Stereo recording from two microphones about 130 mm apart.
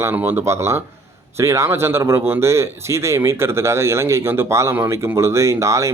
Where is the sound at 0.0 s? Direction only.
15° right (ahead or behind).